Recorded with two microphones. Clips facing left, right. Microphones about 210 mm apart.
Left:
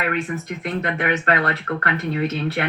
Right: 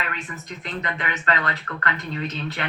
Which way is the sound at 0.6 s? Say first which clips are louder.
Left 5 dB; 60° left (ahead or behind).